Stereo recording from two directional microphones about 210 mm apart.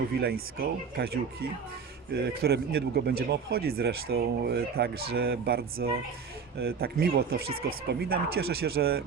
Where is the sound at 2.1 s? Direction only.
50° right (ahead or behind).